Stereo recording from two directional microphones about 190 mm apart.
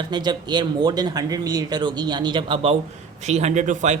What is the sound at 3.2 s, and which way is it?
Speech, 35° right (ahead or behind).